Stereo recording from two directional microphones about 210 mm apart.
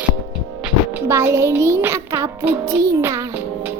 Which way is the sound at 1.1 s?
10° right (ahead or behind).